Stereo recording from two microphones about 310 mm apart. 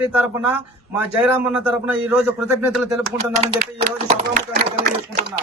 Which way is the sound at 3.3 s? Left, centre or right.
Right.